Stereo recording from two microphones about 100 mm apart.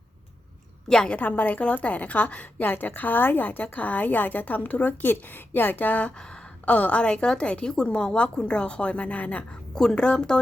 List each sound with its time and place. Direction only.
0.9 s a woman's voice: 5° left (ahead or behind)